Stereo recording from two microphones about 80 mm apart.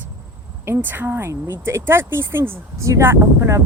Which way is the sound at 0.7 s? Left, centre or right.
Right.